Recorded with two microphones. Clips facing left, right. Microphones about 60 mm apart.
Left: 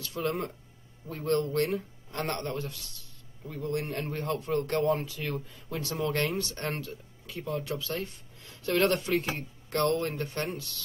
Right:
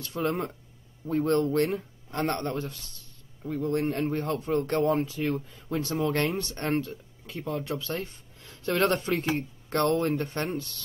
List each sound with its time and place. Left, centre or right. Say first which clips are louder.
0.0 s a man's voice: right 3 dB; right